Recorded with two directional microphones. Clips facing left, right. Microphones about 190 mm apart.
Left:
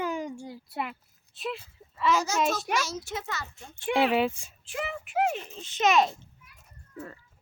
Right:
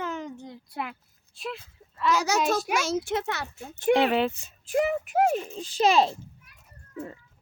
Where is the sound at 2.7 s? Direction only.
55° right (ahead or behind).